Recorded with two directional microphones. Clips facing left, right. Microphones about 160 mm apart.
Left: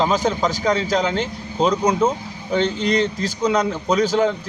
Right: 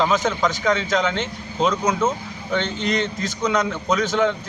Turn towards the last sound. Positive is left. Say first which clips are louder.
# left 2 dB
turn(degrees=35)  # may be behind; listen again after turning